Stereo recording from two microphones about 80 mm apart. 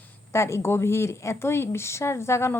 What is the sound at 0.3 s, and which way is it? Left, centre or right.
A woman's voice, left.